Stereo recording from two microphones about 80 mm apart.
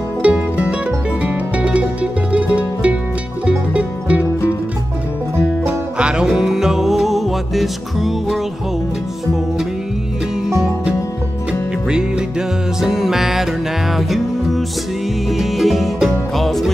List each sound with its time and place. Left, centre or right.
0.2 s music: centre
5.9 s music: centre
11.9 s music: centre